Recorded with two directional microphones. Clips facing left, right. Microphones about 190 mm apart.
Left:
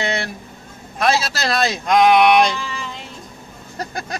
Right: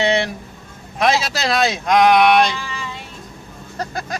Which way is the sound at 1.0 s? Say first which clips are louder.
Right 1 dB; 15° right (ahead or behind).